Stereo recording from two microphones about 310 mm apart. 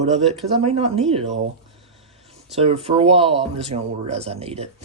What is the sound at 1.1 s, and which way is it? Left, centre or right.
Speech, right.